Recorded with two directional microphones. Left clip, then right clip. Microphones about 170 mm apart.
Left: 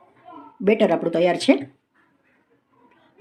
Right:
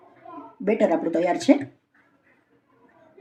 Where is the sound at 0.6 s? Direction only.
65° left (ahead or behind).